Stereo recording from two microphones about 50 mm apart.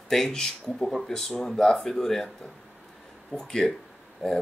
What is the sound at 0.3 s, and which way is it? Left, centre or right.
A man's voice, centre.